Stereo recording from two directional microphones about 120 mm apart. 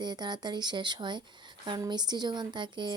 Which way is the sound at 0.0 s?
35° right (ahead or behind).